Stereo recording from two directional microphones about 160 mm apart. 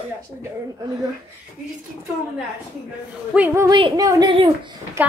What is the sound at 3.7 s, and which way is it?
Speech, 30° right (ahead or behind).